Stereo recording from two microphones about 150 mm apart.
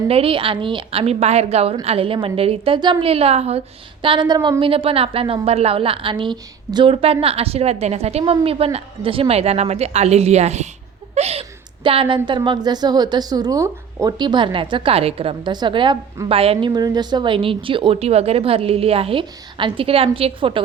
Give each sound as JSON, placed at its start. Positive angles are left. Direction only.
{"t": 0.1, "sound": "a woman's voice", "side_deg": -40}
{"t": 4.0, "sound": "a woman's voice", "side_deg": -30}
{"t": 4.6, "sound": "a woman's voice", "side_deg": -40}